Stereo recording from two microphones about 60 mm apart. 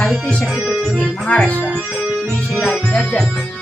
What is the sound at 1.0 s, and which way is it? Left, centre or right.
Speech, left.